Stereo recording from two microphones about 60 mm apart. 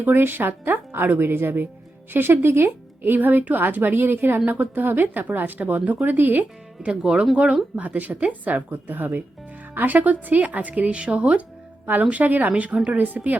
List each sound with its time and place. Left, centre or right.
0.0 s speech: right
6.8 s speech: centre
7.9 s speech: right